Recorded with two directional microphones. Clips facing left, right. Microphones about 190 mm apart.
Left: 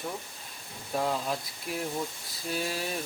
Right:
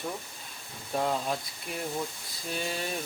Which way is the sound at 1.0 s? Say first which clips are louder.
Right 1 dB; centre (ahead or behind).